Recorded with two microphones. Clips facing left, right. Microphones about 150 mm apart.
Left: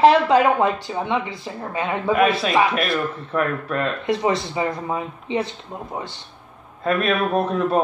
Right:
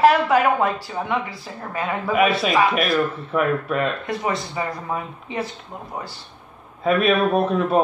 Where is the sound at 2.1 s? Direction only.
5° right (ahead or behind).